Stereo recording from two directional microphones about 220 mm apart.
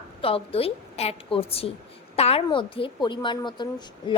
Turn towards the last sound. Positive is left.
turn(degrees=20)  # may be behind; listen again after turning